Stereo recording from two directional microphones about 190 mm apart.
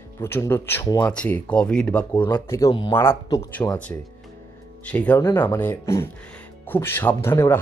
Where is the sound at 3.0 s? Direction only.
15° left (ahead or behind).